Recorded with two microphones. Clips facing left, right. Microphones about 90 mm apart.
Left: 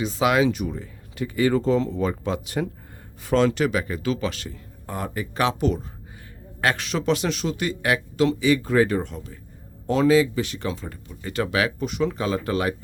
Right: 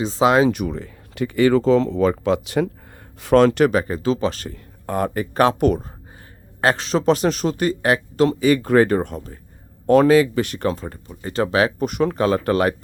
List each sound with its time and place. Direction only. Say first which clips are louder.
0.0 s speech: right 4 dB; 30° right (ahead or behind)
0.5 s speech: right 4 dB; 75° right (ahead or behind)
3.3 s speech: right 6 dB; 55° right (ahead or behind)
4.5 s speech: right 8 dB; 55° right (ahead or behind)
6.6 s speech: right 5 dB; 30° right (ahead or behind)
9.8 s speech: right 5 dB; 55° right (ahead or behind); by 11.9 s 35° right (ahead or behind)
11.9 s speech: right 5 dB; 55° right (ahead or behind)